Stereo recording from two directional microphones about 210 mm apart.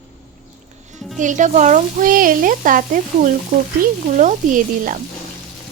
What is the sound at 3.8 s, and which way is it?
Speech, 40° right (ahead or behind).